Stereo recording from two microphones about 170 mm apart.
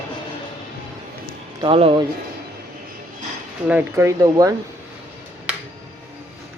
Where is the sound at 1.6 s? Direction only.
30° right (ahead or behind).